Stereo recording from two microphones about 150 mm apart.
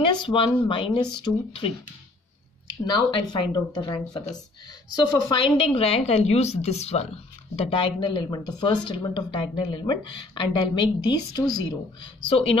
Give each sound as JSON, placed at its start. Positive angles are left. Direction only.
{"t": 0.0, "sound": "speech", "side_deg": 30}
{"t": 2.9, "sound": "speech", "side_deg": 30}
{"t": 5.2, "sound": "a woman's voice", "side_deg": 30}
{"t": 12.3, "sound": "speech", "side_deg": 40}